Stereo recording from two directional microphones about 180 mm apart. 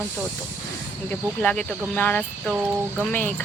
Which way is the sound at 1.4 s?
5° left (ahead or behind).